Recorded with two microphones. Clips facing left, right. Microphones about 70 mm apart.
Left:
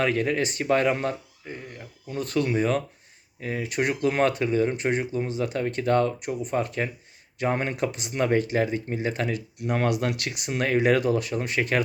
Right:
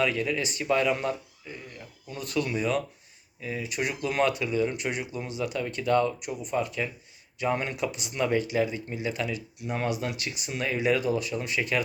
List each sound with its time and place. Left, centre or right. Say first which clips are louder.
0.0 s speech: left 3 dB; left
3.4 s speech: left 4 dB; left